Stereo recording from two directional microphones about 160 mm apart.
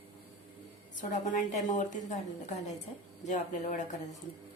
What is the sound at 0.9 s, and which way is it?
A woman's voice, 50° left (ahead or behind).